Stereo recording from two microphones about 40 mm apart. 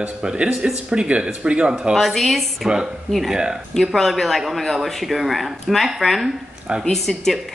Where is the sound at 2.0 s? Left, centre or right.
Centre.